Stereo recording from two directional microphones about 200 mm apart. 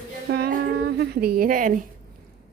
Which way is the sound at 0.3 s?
55° right (ahead or behind).